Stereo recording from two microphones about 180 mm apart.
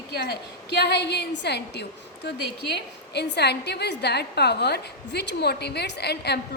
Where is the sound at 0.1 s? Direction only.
65° left (ahead or behind).